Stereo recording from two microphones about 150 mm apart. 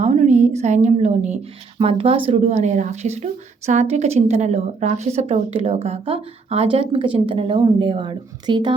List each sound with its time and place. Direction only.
0.0 s a woman's voice: 50° right (ahead or behind)
1.8 s a woman's voice: 40° right (ahead or behind)